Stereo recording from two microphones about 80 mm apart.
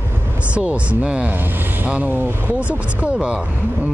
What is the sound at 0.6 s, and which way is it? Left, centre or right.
Speech, centre.